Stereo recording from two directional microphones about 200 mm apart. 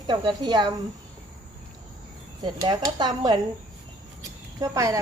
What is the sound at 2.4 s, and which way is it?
Speech, 20° right (ahead or behind).